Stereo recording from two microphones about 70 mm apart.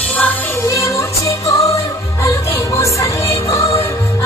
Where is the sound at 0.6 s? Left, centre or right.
Left.